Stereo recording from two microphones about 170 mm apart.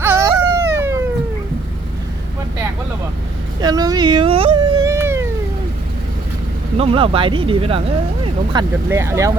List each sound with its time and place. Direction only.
0.0 s baby cry: 15° right (ahead or behind)
3.6 s speech: 20° right (ahead or behind)
4.8 s a sound: 15° right (ahead or behind)
6.7 s speech: 35° right (ahead or behind); by 9.3 s 15° right (ahead or behind)